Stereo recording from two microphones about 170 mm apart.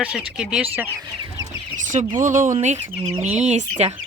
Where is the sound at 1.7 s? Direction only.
50° right (ahead or behind).